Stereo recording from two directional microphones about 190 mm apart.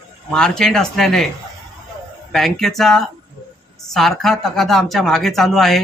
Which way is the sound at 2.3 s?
Centre (ahead or behind).